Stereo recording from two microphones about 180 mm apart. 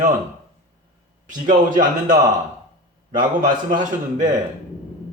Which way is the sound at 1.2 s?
45° right (ahead or behind).